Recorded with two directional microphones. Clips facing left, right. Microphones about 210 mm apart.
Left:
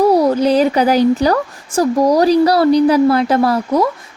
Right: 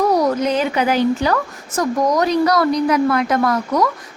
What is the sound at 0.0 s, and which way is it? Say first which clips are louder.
A woman's voice: left 5 dB; 30° left (ahead or behind).